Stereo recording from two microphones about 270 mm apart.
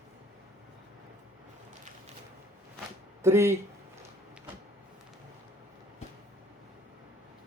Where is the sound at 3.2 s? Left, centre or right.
Centre.